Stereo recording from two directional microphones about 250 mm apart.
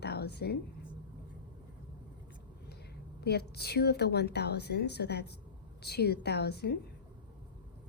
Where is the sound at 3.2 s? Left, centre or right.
Left.